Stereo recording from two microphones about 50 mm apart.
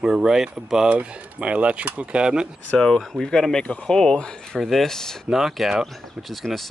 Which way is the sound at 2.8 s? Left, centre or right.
Centre.